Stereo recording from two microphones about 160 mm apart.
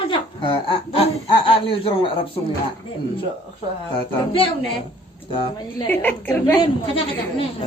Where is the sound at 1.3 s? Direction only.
35° left (ahead or behind).